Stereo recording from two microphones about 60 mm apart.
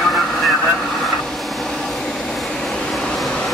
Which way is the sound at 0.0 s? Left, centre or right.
Centre.